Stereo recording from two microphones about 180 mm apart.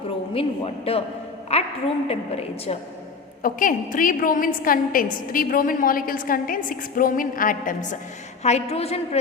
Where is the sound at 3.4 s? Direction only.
50° left (ahead or behind).